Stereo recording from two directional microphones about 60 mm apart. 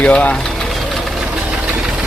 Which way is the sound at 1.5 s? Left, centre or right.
Centre.